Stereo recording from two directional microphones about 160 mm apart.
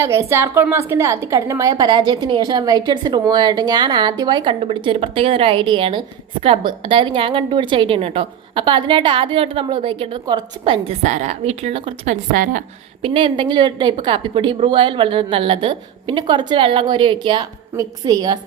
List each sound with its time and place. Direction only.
0.0 s a woman's voice: 15° right (ahead or behind); by 12.6 s 55° right (ahead or behind)
13.0 s a woman's voice: 35° right (ahead or behind)